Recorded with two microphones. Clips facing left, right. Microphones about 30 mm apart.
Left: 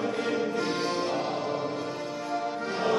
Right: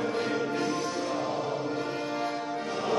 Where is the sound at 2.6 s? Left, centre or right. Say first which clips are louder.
Left 3 dB; left.